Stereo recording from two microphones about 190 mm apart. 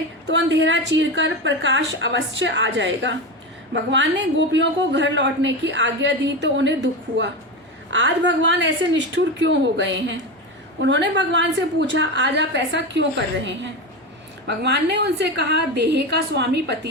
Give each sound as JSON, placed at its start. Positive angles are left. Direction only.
{"t": 0.3, "sound": "a woman's voice", "side_deg": -65}